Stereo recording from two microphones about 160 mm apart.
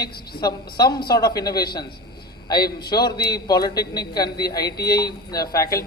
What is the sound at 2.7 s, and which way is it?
Speech, 75° left (ahead or behind).